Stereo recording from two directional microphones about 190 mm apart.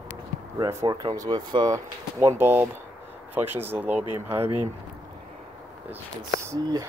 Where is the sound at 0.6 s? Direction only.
20° right (ahead or behind).